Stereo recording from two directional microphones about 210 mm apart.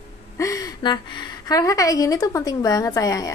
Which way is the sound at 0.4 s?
15° left (ahead or behind).